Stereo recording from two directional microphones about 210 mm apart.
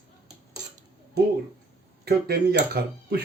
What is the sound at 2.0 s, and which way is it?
Speech, 50° right (ahead or behind).